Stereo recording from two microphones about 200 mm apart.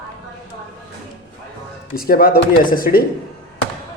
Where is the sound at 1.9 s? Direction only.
45° left (ahead or behind).